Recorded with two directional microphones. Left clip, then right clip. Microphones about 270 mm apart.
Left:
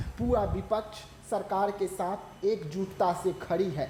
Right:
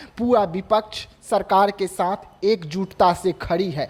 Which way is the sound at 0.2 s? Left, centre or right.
Right.